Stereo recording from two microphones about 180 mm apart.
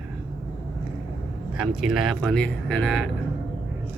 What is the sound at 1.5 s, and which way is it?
Speech, 5° right (ahead or behind).